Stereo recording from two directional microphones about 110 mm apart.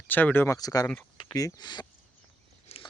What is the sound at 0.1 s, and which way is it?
Speech, 15° left (ahead or behind).